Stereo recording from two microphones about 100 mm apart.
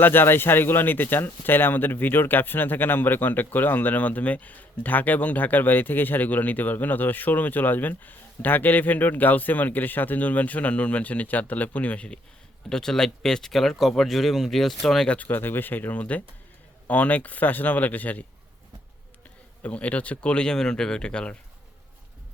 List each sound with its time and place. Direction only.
0.0 s speech: 20° left (ahead or behind)
19.6 s speech: 15° left (ahead or behind)